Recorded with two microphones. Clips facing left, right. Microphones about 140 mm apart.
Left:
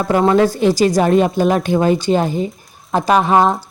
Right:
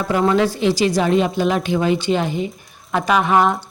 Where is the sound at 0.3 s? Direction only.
45° left (ahead or behind).